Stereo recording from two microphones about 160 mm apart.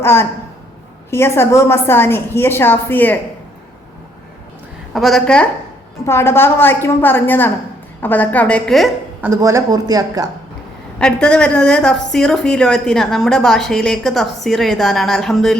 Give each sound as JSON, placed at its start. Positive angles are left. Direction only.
{"t": 0.0, "sound": "a woman's voice", "side_deg": 15}
{"t": 4.9, "sound": "a woman's voice", "side_deg": 0}
{"t": 9.2, "sound": "a woman's voice", "side_deg": -15}
{"t": 11.0, "sound": "a woman's voice", "side_deg": 5}